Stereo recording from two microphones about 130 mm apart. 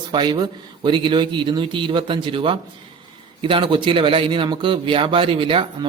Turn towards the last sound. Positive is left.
turn(degrees=-40)  # may be behind; listen again after turning